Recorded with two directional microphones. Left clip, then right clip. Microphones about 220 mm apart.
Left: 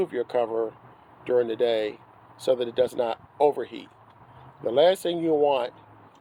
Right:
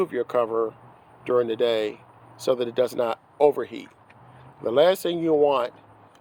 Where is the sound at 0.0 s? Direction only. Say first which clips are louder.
Right 2 dB; 45° right (ahead or behind).